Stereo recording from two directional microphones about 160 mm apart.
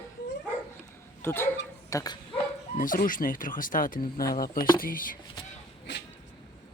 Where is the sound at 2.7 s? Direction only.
60° left (ahead or behind).